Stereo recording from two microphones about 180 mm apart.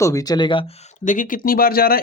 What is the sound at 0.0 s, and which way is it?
Speech, 20° left (ahead or behind).